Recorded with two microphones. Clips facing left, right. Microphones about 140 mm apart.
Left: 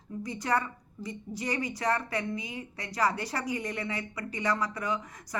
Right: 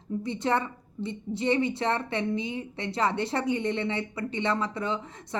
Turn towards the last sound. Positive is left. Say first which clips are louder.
# right 2 dB
turn(degrees=-25)  # may be behind; listen again after turning